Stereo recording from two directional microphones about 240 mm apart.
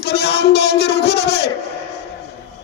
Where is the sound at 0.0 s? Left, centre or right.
Left.